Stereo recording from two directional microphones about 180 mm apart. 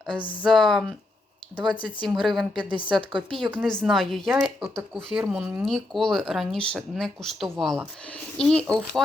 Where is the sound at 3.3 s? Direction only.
5° right (ahead or behind).